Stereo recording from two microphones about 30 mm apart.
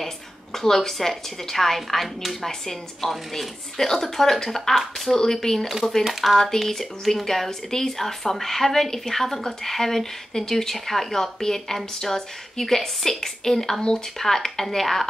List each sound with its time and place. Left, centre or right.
0.0 s a woman's voice: centre